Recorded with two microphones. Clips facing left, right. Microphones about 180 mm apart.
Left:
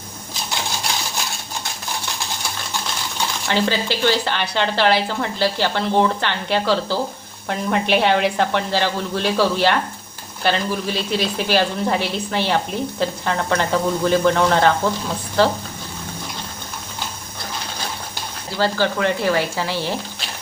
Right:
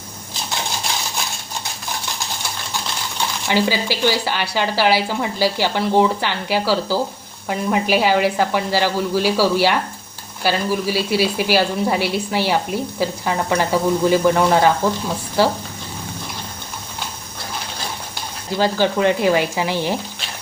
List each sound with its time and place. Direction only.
3.5 s speech: 10° right (ahead or behind)
18.5 s speech: 15° right (ahead or behind)